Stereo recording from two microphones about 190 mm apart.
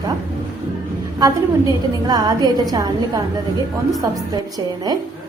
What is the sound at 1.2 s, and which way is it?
A woman's voice, 20° right (ahead or behind).